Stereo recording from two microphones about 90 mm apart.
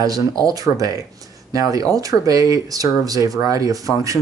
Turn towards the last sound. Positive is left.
turn(degrees=-40)  # may be behind; listen again after turning